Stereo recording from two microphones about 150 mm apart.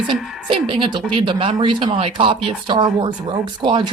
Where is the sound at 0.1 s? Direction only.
35° right (ahead or behind).